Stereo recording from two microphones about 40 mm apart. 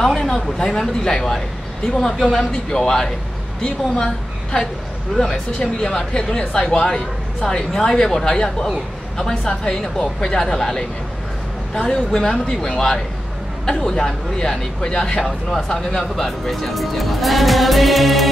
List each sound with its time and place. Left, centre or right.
0.0 s a woman's voice: centre